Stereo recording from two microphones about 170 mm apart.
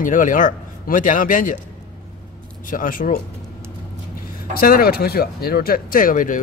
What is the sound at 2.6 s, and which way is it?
Speech, 55° left (ahead or behind).